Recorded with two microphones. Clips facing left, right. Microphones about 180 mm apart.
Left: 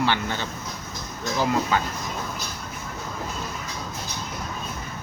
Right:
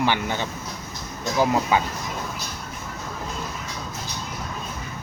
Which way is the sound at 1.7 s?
15° right (ahead or behind).